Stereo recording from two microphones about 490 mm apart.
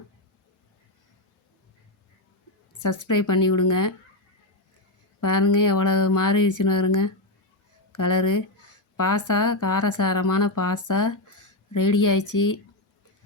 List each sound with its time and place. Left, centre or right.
2.7 s a woman's voice: left
5.2 s a woman's voice: left